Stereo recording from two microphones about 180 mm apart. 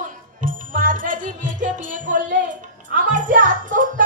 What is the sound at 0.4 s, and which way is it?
Music, 50° right (ahead or behind).